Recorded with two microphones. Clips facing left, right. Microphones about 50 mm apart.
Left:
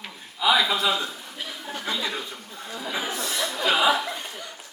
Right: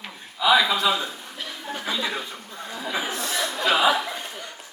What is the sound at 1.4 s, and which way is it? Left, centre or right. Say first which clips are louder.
Chuckle: right 2 dB; centre.